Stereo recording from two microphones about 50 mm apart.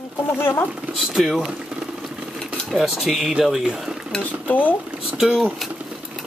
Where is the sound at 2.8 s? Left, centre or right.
Centre.